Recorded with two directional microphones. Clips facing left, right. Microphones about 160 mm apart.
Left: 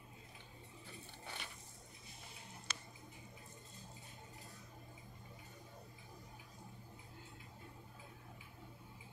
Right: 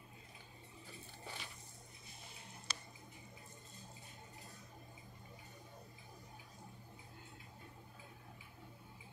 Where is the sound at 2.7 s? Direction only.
35° right (ahead or behind).